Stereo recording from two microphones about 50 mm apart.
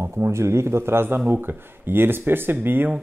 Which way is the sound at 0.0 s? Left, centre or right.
Right.